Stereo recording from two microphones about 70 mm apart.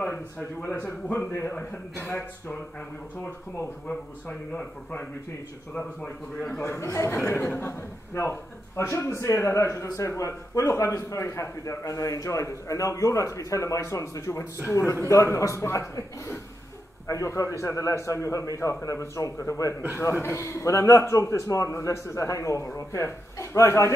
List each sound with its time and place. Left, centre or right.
0.0 s a man's voice: left
2.0 s a man's voice: left
3.9 s speech: centre
6.6 s a man's voice: left
17.1 s a man's voice: left